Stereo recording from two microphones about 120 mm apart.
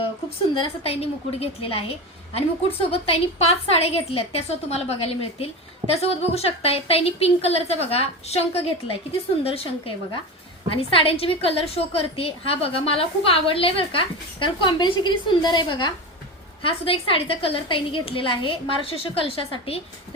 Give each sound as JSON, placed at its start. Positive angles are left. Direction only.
{"t": 0.6, "sound": "a woman's voice", "side_deg": 55}